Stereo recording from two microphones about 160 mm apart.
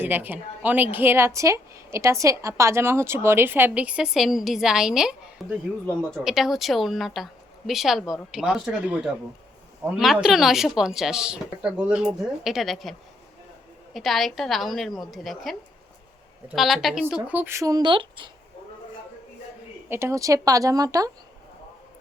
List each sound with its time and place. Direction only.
0.0 s a woman's voice: 10° right (ahead or behind)
17.2 s speech: 10° right (ahead or behind); by 18.3 s 30° right (ahead or behind)
19.9 s speech: 15° right (ahead or behind)